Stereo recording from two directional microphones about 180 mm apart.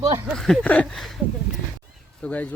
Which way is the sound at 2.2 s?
10° left (ahead or behind).